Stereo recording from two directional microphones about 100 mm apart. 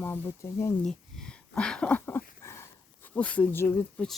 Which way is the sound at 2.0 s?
25° left (ahead or behind).